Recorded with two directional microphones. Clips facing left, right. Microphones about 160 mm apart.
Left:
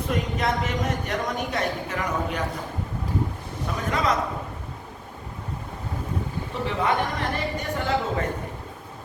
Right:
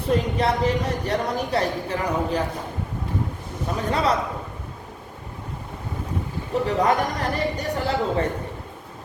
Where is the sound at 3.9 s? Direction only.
30° right (ahead or behind).